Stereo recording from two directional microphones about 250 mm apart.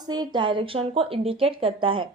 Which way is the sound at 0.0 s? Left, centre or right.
Centre.